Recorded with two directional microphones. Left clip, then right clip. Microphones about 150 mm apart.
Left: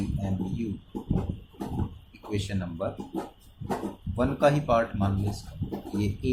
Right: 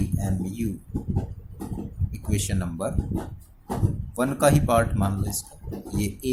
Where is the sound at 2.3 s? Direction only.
40° right (ahead or behind).